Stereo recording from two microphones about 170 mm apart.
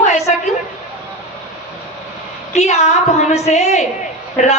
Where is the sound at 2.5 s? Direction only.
40° left (ahead or behind).